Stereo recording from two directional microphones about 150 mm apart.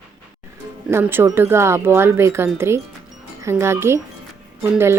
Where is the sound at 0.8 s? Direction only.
15° right (ahead or behind).